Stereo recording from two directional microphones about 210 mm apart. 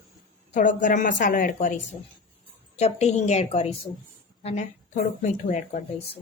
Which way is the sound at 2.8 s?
30° left (ahead or behind).